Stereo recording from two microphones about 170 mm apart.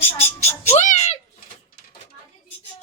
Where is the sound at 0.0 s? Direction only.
15° left (ahead or behind).